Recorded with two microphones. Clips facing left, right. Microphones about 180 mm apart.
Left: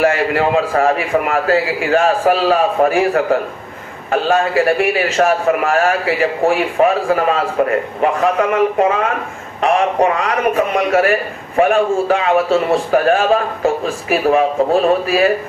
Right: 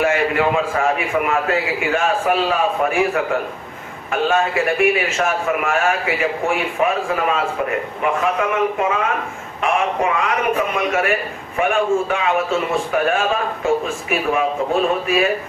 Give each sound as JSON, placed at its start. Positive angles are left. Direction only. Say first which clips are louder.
{"t": 0.0, "sound": "a man's voice", "louder": "left 3 dB", "side_deg": 35}